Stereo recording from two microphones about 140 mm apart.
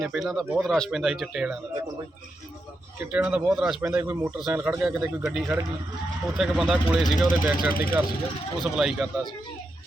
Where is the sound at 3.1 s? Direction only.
5° right (ahead or behind).